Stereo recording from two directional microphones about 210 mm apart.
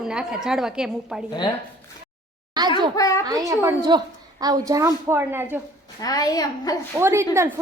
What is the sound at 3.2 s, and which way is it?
A woman's voice, 20° right (ahead or behind).